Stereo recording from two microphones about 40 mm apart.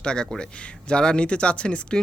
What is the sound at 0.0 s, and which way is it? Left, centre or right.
Speech, left.